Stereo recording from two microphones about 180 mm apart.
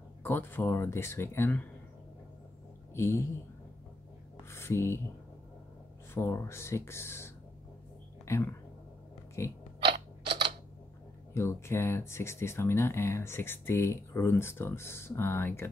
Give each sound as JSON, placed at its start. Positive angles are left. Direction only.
{"t": 0.2, "sound": "speech", "side_deg": 10}
{"t": 2.9, "sound": "speech", "side_deg": 15}
{"t": 4.5, "sound": "speech", "side_deg": 15}
{"t": 6.1, "sound": "speech", "side_deg": 15}
{"t": 11.3, "sound": "speech", "side_deg": 15}